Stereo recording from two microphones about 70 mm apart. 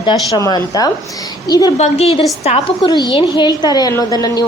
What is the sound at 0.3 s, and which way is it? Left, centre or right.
A woman's voice, left.